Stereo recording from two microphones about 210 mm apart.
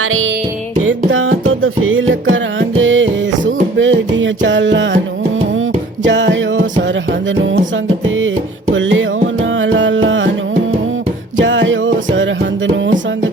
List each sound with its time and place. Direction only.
0.0 s music: 75° right (ahead or behind)
6.1 s music: 60° right (ahead or behind)
11.3 s music: 60° right (ahead or behind)